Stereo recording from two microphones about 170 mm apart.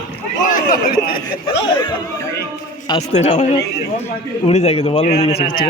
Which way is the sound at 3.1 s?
45° left (ahead or behind).